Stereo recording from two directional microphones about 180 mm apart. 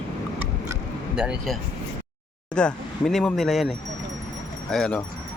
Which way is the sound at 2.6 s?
5° left (ahead or behind).